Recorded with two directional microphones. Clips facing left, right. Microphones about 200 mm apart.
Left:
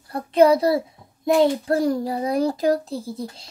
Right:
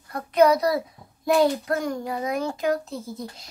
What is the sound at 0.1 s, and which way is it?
A child's voice, 30° left (ahead or behind).